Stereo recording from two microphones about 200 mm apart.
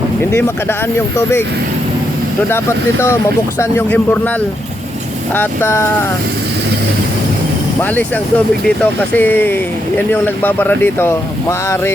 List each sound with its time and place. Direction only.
0.2 s speech: 10° left (ahead or behind)
2.5 s speech: 15° left (ahead or behind)
7.8 s speech: 10° left (ahead or behind)